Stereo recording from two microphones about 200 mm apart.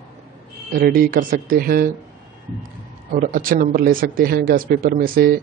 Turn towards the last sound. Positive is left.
turn(degrees=-45)  # may be behind; listen again after turning